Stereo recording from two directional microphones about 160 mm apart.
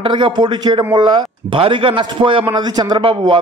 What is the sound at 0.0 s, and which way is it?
A man's voice, 30° right (ahead or behind).